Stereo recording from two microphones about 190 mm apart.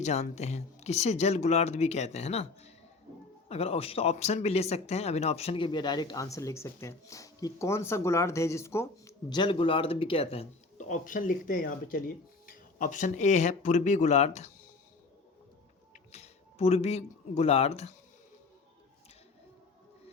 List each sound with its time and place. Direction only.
0.0 s speech: 35° left (ahead or behind)
16.1 s speech: 35° left (ahead or behind)